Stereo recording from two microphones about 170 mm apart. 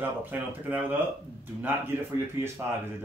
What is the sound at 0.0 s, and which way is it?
Speech, 10° right (ahead or behind).